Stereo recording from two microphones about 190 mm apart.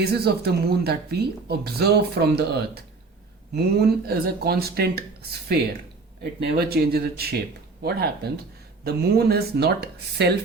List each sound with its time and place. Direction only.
0.0 s speech: 60° right (ahead or behind)
6.4 s speech: 55° right (ahead or behind)